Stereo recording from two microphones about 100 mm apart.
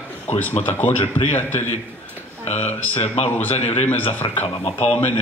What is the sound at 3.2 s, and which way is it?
Speech, 90° left.